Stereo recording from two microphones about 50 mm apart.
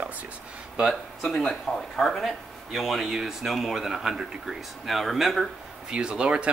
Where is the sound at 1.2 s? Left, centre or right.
Centre.